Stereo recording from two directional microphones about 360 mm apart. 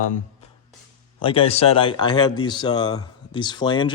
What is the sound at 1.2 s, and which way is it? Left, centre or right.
Speech, centre.